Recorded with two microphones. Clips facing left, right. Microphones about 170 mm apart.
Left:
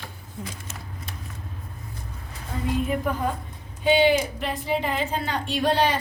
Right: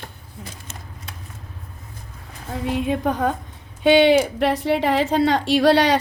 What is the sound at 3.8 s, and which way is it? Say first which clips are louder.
A woman's voice: right 5 dB; 75° right (ahead or behind).